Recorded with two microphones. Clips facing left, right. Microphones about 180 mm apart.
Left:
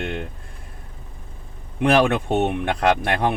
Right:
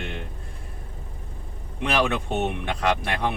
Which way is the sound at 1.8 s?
55° left (ahead or behind).